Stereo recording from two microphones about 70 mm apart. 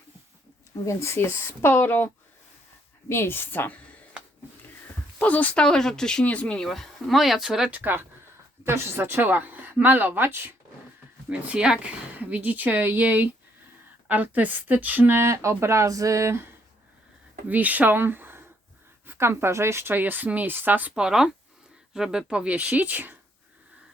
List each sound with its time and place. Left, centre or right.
0.9 s speech: left
3.1 s a woman's voice: left
5.2 s a woman's voice: left
5.6 s speech: centre
7.7 s a woman's voice: right
11.3 s speech: centre; by 16.4 s right
17.5 s speech: right
20.9 s speech: centre; by 23.1 s right